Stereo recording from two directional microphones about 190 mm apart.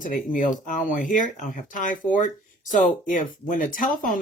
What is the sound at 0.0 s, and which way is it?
Speech, 45° left (ahead or behind).